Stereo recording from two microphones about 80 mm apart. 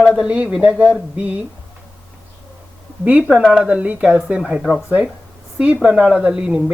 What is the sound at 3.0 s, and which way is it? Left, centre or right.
Speech, centre.